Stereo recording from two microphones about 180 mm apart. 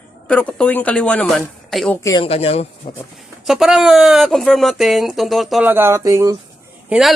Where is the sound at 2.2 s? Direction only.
35° left (ahead or behind).